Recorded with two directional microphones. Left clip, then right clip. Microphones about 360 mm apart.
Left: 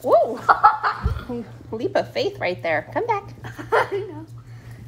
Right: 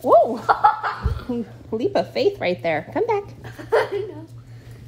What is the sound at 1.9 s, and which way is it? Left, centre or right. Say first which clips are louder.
A woman's voice: right 2 dB; centre.